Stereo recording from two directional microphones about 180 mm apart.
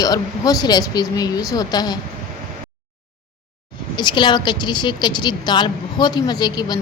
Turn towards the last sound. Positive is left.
turn(degrees=25)  # may be behind; listen again after turning